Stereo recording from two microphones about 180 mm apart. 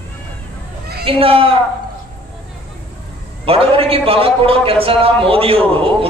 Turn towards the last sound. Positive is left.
turn(degrees=-30)  # may be behind; listen again after turning